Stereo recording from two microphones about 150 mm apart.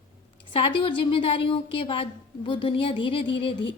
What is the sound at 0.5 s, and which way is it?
A woman's voice, 35° left (ahead or behind).